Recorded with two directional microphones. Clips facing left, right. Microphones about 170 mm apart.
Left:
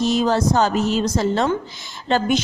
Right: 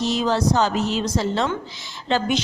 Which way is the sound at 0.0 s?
50° left (ahead or behind).